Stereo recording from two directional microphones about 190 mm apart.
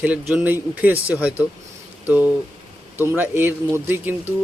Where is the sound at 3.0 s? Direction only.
10° right (ahead or behind).